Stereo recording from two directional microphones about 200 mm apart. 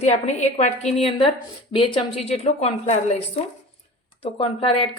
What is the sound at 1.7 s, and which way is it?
A woman's voice, 25° left (ahead or behind).